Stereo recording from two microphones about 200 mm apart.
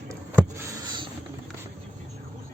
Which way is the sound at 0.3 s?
15° right (ahead or behind).